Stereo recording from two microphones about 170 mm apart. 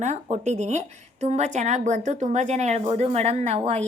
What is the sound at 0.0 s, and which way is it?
A woman's voice, 45° right (ahead or behind).